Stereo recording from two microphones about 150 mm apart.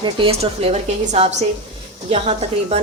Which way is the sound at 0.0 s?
35° right (ahead or behind).